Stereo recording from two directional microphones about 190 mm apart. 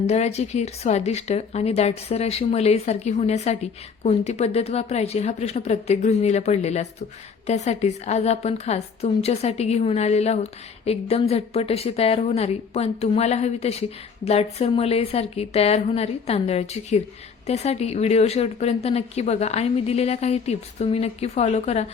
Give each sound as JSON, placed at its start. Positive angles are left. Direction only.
{"t": 0.0, "sound": "speech", "side_deg": 35}